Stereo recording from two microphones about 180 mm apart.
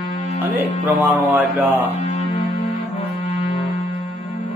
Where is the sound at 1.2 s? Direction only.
10° right (ahead or behind).